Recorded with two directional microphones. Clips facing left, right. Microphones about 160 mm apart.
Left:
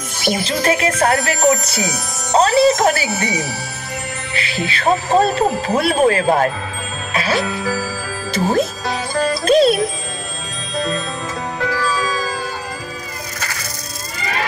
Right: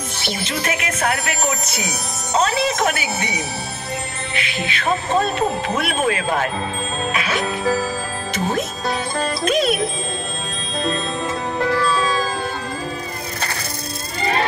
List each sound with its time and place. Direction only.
0.5 s speech: 35° left (ahead or behind)
4.4 s speech: 35° left (ahead or behind)
7.2 s music: 35° left (ahead or behind)
7.4 s music: 25° right (ahead or behind)
8.3 s music: 35° left (ahead or behind)
8.8 s music: 25° right (ahead or behind)
9.4 s music: 35° left (ahead or behind)